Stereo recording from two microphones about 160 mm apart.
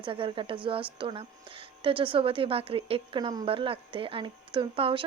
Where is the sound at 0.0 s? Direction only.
30° right (ahead or behind).